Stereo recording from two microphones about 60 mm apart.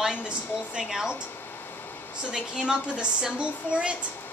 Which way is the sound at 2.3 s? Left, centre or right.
Centre.